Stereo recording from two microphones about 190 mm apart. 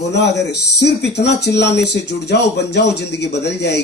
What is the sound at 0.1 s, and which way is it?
Speech, 65° left (ahead or behind).